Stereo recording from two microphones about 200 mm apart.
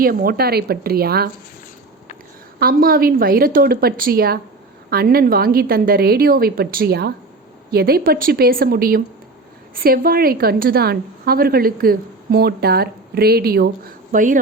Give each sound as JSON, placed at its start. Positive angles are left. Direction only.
{"t": 0.0, "sound": "a woman's voice", "side_deg": -45}
{"t": 2.6, "sound": "a woman's voice", "side_deg": -45}
{"t": 14.1, "sound": "speech", "side_deg": -40}